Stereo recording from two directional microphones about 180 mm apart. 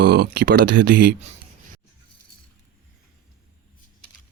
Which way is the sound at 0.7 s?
75° right (ahead or behind).